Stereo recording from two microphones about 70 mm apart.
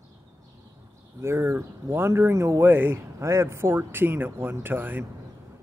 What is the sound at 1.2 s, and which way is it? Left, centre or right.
Speech, right.